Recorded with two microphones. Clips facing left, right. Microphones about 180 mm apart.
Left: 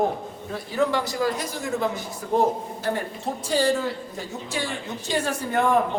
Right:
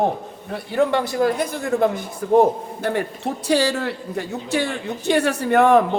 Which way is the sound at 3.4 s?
70° right (ahead or behind).